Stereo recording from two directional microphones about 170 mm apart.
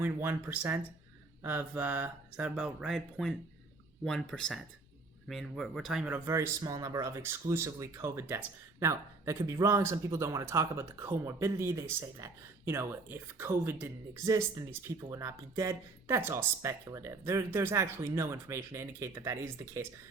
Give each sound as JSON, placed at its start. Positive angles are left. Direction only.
{"t": 0.0, "sound": "speech", "side_deg": -10}